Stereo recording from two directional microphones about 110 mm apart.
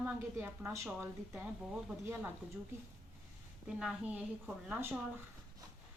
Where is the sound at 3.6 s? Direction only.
10° right (ahead or behind).